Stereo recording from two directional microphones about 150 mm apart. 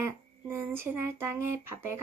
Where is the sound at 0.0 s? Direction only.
15° right (ahead or behind).